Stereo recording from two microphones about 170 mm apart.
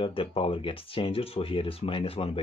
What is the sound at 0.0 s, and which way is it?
Speech, 30° left (ahead or behind).